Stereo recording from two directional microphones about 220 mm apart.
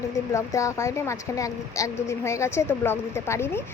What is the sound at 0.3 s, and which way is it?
A woman's voice, 15° left (ahead or behind).